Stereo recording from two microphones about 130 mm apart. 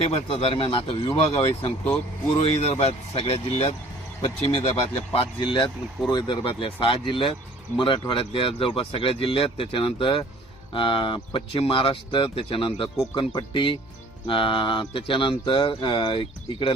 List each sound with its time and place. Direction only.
0.0 s speech: 45° left (ahead or behind)